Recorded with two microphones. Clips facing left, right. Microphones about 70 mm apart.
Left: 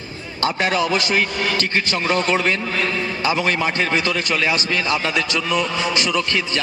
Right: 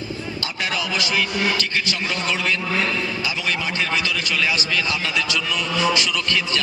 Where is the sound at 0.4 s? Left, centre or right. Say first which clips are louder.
Left 9 dB; left.